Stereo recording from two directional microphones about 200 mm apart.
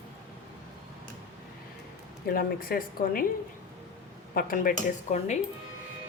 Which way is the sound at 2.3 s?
50° left (ahead or behind).